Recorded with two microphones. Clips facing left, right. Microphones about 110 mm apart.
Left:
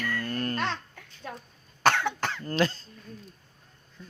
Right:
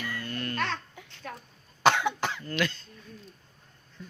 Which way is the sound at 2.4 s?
35° left (ahead or behind).